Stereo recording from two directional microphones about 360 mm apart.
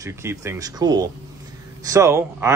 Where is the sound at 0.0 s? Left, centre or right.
Centre.